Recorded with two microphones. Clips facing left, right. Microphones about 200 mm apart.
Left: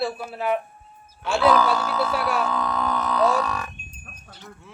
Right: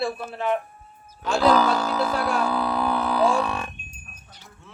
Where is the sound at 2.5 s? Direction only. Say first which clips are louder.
Right 2 dB; 35° right (ahead or behind).